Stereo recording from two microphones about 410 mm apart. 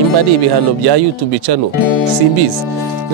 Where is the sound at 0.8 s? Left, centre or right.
Right.